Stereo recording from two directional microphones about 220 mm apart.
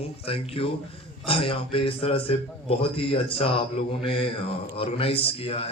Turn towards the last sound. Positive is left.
turn(degrees=25)  # may be behind; listen again after turning